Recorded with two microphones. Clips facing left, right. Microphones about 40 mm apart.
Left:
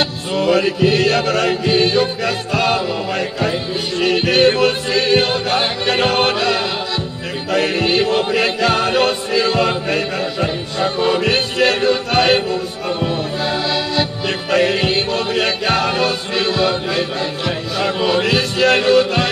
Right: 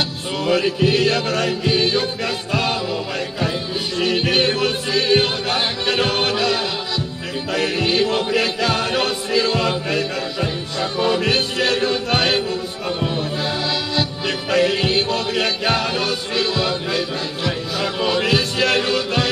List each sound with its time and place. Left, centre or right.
0.6 s music: left
18.1 s music: left